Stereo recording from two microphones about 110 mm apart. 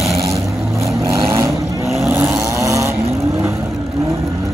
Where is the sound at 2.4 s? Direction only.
30° right (ahead or behind).